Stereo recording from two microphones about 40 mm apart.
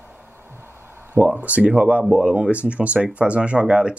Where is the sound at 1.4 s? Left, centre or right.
Right.